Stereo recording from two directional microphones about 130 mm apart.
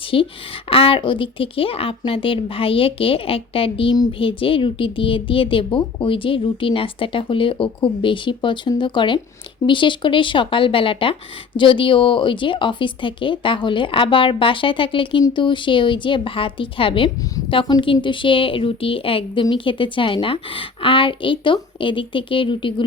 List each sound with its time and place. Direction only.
0.1 s speech: 45° left (ahead or behind)